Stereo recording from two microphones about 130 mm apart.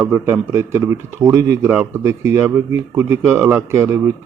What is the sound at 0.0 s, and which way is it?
Speech, 20° right (ahead or behind).